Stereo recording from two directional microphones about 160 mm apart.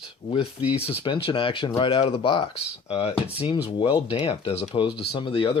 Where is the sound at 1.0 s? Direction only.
30° left (ahead or behind).